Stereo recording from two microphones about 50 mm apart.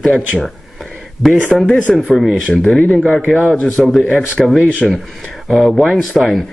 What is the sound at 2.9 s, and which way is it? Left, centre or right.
Speech, left.